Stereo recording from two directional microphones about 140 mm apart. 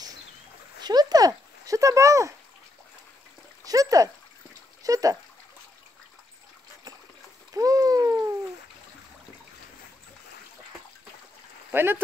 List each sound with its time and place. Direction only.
0.7 s speech: 30° right (ahead or behind)
3.6 s speech: 25° right (ahead or behind)
7.5 s a sound: 25° right (ahead or behind)
11.7 s speech: 15° right (ahead or behind)